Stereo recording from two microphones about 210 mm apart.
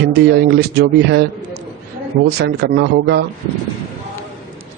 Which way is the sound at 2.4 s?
50° right (ahead or behind).